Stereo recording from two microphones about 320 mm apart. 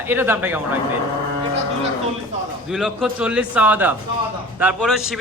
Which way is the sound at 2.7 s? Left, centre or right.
Centre.